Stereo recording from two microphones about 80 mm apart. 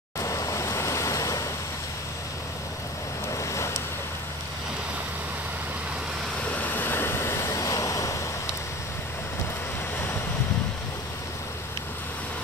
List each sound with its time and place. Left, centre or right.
0.2 s waves: left
3.3 s boat: left
6.4 s waves: centre; by 8.2 s left